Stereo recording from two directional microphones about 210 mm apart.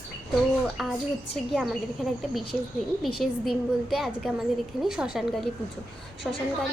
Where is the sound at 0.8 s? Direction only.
Centre (ahead or behind).